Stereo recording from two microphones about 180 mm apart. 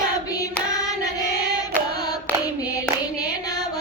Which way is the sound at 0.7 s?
20° left (ahead or behind).